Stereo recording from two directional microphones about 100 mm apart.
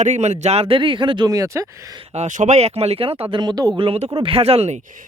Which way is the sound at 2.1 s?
90° right.